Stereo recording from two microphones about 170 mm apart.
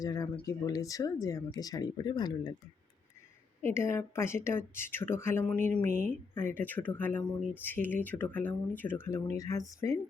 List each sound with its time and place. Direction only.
0.0 s speech: 20° left (ahead or behind)
3.6 s speech: 15° left (ahead or behind)